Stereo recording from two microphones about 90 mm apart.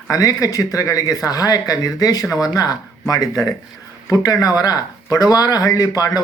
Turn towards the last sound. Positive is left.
turn(degrees=45)  # may be behind; listen again after turning